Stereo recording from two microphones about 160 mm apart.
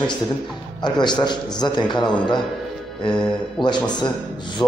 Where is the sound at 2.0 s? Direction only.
5° left (ahead or behind).